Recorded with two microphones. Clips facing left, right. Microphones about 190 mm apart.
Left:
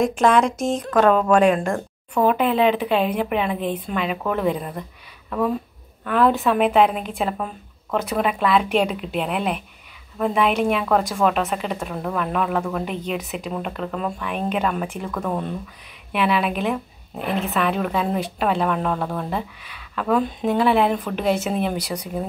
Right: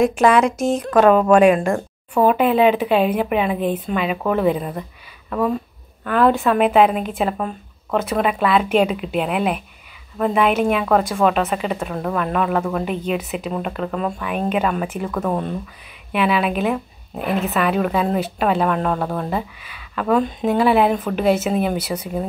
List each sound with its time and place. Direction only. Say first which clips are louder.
0.0 s a woman's voice: right 3 dB; 5° right (ahead or behind)